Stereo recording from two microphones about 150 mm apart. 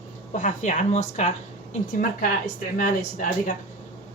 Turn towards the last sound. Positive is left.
turn(degrees=65)  # may be behind; listen again after turning